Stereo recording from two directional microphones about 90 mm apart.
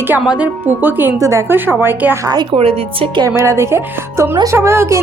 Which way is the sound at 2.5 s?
85° right.